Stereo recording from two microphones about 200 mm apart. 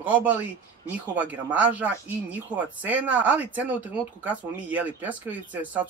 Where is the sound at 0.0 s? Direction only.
10° right (ahead or behind).